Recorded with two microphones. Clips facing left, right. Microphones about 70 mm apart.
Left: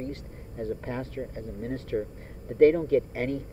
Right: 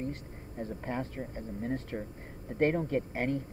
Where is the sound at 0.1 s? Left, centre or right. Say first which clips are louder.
Left 3 dB; centre.